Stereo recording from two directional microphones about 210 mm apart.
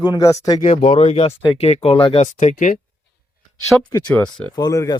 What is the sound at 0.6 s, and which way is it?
Speech, 35° left (ahead or behind).